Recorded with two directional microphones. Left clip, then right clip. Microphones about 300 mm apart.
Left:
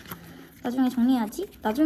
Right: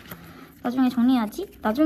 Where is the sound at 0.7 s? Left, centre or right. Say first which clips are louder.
Right 2 dB; centre.